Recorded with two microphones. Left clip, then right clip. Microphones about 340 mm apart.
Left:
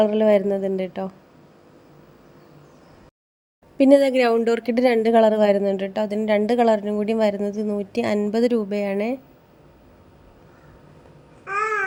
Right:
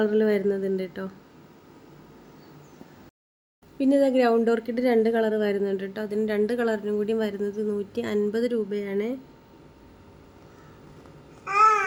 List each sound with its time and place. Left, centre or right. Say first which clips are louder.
0.0 s speech: left 5 dB; centre
3.8 s speech: left 6 dB; left